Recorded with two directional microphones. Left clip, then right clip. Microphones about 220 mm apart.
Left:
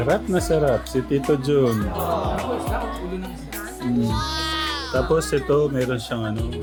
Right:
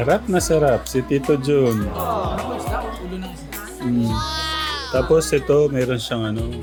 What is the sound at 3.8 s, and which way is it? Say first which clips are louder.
Music: right 2 dB; centre (ahead or behind).